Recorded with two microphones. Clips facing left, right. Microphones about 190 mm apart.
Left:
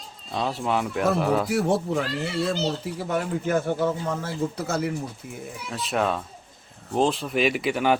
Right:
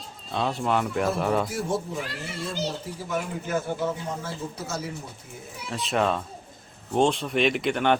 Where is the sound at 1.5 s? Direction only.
70° left (ahead or behind).